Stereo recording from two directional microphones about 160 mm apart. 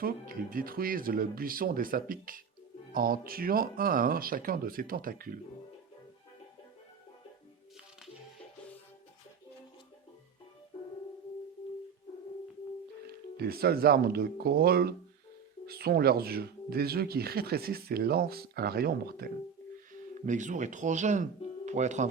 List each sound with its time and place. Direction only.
0.0 s speech: 65° right (ahead or behind)
13.3 s speech: 80° right
20.2 s speech: 50° right (ahead or behind)